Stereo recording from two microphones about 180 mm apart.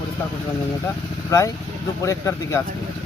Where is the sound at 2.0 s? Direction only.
15° left (ahead or behind).